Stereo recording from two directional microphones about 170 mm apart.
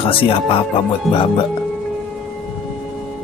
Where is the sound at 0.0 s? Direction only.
30° left (ahead or behind).